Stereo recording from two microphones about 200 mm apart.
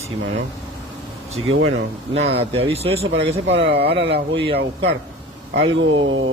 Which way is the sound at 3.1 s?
60° right (ahead or behind).